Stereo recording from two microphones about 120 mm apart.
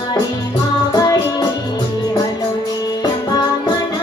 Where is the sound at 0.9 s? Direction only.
35° left (ahead or behind).